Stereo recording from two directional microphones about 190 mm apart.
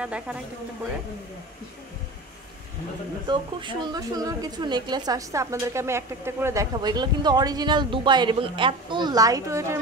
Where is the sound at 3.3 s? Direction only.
20° right (ahead or behind).